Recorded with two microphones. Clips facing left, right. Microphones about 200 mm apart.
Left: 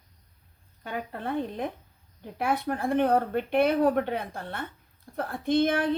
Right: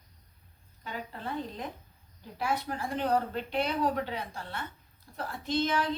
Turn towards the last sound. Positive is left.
turn(degrees=55)  # may be behind; listen again after turning